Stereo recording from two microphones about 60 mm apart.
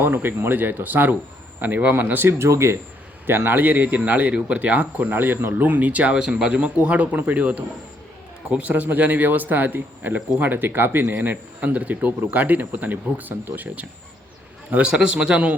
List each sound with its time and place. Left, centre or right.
0.0 s speech: right
2.4 s speech: right
3.2 s speech: right
14.7 s a man's voice: centre